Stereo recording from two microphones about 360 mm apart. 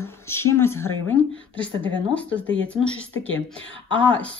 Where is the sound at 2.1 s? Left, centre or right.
Centre.